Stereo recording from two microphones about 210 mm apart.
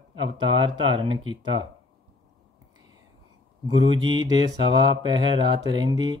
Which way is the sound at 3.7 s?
20° right (ahead or behind).